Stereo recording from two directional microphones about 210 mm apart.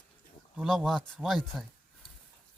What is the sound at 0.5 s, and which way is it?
Speech, centre (ahead or behind).